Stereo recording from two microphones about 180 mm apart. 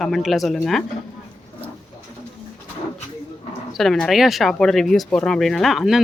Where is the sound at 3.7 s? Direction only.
Centre (ahead or behind).